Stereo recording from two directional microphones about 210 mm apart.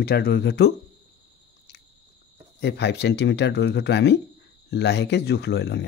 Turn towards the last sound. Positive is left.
turn(degrees=55)  # may be behind; listen again after turning